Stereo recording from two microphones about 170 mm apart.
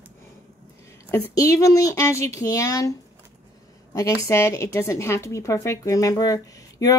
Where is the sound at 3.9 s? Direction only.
15° left (ahead or behind).